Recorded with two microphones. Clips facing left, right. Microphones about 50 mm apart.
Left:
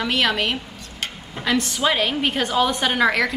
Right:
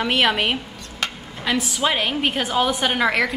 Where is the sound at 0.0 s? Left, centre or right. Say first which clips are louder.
Right 2 dB; centre.